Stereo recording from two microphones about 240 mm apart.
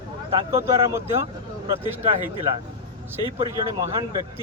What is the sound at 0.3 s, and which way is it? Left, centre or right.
Speech, centre.